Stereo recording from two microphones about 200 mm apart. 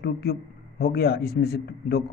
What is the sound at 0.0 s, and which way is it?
A man's voice, 55° left (ahead or behind).